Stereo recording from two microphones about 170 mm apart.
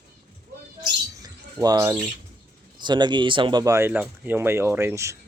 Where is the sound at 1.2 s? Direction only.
20° right (ahead or behind).